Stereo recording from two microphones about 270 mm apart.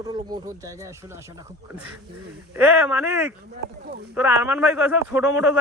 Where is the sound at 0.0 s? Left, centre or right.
Centre.